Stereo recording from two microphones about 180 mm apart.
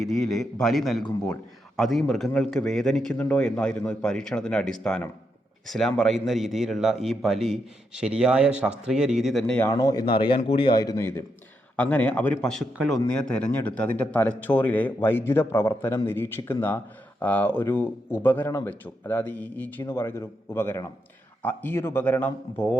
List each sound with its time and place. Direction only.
0.1 s speech: centre (ahead or behind)
9.7 s a man's voice: 20° left (ahead or behind)